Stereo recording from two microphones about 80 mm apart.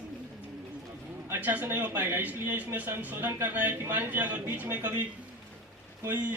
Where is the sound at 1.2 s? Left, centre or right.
Right.